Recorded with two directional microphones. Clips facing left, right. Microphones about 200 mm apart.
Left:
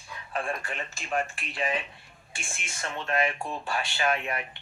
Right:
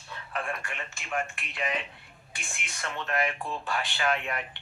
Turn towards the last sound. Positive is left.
turn(degrees=20)  # may be behind; listen again after turning